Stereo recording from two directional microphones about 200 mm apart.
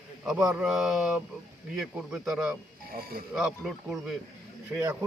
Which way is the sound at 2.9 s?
50° right (ahead or behind).